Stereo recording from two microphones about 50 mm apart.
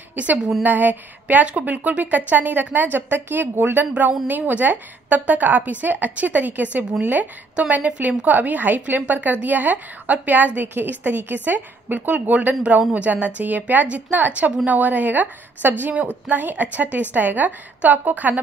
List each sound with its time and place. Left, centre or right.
0.1 s a woman's voice: right